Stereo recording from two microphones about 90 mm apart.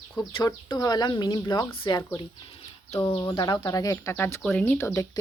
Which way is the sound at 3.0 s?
75° left (ahead or behind).